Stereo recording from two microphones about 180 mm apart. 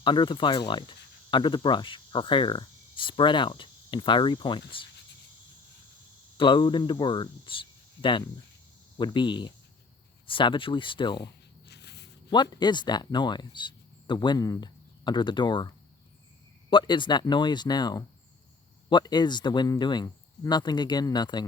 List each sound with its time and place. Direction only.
0.0 s speech: 25° left (ahead or behind)
6.3 s speech: 25° left (ahead or behind)
11.7 s a sound: 70° left (ahead or behind)
12.3 s speech: 25° left (ahead or behind)